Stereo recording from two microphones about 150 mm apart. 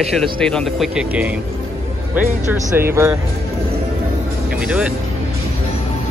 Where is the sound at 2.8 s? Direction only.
15° right (ahead or behind).